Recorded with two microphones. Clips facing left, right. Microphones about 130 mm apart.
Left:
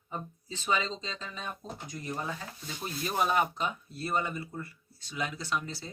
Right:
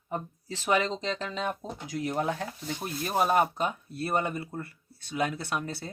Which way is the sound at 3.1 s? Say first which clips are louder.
Right 4 dB; 45° right (ahead or behind).